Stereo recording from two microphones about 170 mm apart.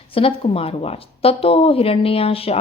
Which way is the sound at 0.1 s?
35° left (ahead or behind).